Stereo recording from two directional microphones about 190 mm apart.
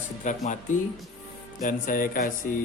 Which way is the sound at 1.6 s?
45° left (ahead or behind).